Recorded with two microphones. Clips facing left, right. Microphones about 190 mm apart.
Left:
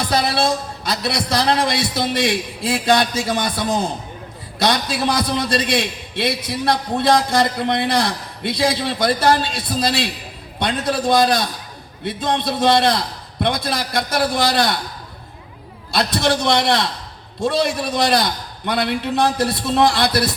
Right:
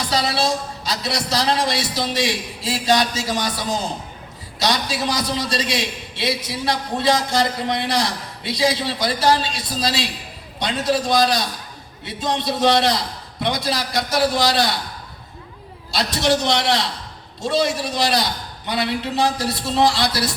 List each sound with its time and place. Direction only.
0.0 s a man's voice: 55° left (ahead or behind)
15.9 s a man's voice: 55° left (ahead or behind)